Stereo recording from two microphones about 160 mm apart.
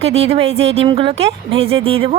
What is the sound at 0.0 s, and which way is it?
A woman's voice, 40° right (ahead or behind).